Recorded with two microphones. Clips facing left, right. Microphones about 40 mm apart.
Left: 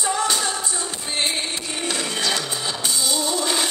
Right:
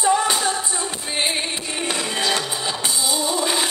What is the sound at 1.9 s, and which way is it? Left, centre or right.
Music, centre.